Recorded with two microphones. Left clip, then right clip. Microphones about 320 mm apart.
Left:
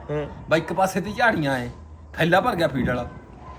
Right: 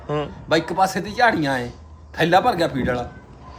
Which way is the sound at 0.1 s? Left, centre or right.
Centre.